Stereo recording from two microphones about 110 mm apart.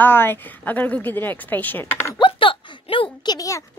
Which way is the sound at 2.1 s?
50° left (ahead or behind).